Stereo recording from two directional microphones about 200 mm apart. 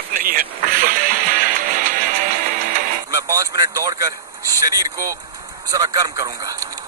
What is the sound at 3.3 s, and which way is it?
Speech, 15° right (ahead or behind).